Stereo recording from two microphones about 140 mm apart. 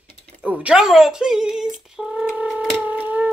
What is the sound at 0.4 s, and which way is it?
Speech, 10° right (ahead or behind).